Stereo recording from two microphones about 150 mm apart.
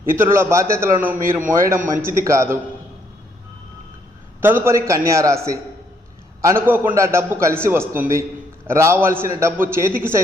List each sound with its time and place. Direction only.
0.0 s a man's voice: 15° right (ahead or behind)
4.4 s a man's voice: 15° right (ahead or behind)